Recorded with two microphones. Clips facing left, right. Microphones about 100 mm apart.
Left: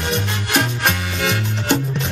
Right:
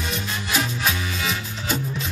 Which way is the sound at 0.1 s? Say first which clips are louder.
Left 6 dB; 65° left (ahead or behind).